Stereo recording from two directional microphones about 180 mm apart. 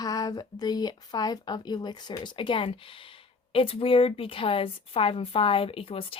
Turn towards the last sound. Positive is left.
turn(degrees=30)  # may be behind; listen again after turning